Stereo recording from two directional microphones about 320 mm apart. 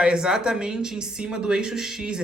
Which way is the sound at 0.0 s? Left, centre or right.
Centre.